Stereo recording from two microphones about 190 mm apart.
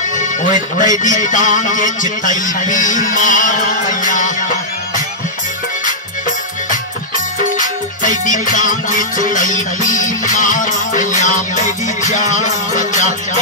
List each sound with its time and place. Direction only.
0.2 s a man's voice: 40° left (ahead or behind)
4.0 s music: 40° left (ahead or behind)
8.0 s music: 45° left (ahead or behind)